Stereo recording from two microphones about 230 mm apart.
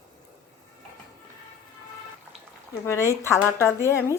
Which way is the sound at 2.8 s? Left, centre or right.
Centre.